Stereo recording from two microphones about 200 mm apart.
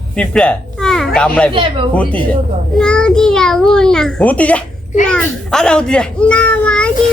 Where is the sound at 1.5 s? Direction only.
25° right (ahead or behind).